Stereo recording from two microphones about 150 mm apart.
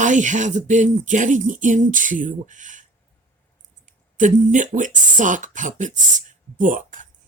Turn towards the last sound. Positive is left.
turn(degrees=-60)  # may be behind; listen again after turning